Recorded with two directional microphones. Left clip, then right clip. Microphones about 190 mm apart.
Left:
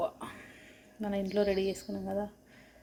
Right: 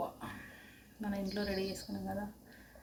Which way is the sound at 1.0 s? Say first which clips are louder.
Left 8 dB; 20° left (ahead or behind).